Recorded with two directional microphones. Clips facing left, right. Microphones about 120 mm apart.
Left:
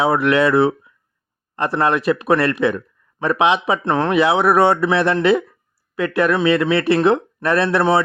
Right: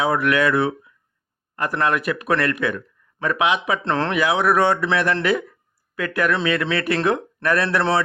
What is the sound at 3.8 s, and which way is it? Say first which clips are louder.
Speech: left 6 dB; 15° left (ahead or behind).